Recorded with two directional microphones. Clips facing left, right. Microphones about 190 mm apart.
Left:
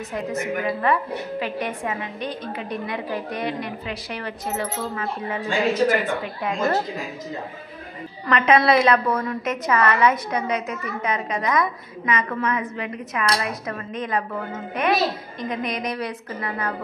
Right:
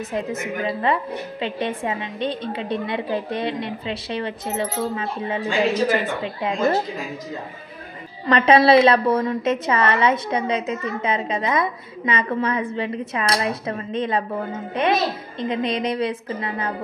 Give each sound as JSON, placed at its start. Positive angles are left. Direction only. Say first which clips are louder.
{"t": 0.1, "sound": "a woman's voice", "louder": "left 2 dB", "side_deg": -25}
{"t": 8.3, "sound": "a woman's voice", "louder": "right 3 dB", "side_deg": -30}